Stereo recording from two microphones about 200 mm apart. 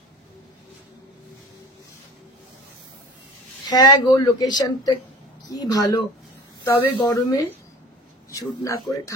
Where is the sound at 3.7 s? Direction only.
20° left (ahead or behind).